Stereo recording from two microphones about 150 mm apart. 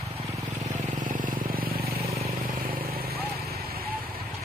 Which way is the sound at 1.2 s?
75° right (ahead or behind).